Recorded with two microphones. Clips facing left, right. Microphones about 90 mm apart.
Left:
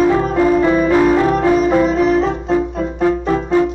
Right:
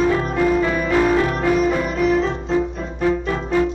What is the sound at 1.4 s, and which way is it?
Music, 35° left (ahead or behind).